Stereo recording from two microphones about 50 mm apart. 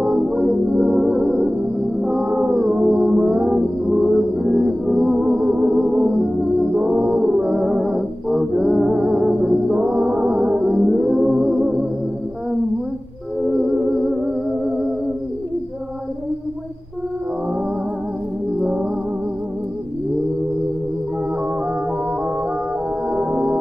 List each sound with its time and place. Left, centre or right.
0.0 s music: centre
8.9 s music: right
13.4 s music: centre
18.6 s music: right
23.0 s music: right